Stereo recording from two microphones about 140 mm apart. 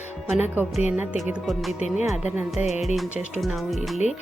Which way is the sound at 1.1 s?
Centre (ahead or behind).